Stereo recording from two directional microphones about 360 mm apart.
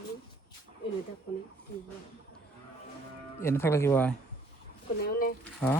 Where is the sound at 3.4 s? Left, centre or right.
Centre.